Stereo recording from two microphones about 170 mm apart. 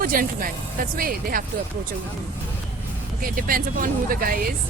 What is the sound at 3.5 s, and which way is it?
Speech, 60° right (ahead or behind).